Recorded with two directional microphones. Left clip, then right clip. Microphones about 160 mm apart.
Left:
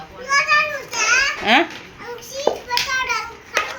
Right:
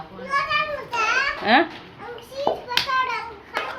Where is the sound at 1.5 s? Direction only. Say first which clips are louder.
Left 2 dB; 10° left (ahead or behind).